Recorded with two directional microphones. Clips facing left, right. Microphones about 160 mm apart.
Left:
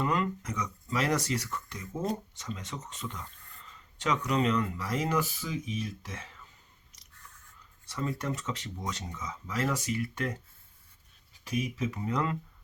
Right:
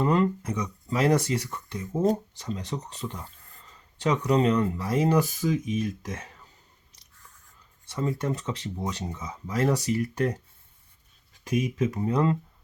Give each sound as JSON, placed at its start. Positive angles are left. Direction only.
{"t": 0.0, "sound": "speech", "side_deg": -30}
{"t": 7.9, "sound": "speech", "side_deg": -25}
{"t": 11.4, "sound": "speech", "side_deg": -45}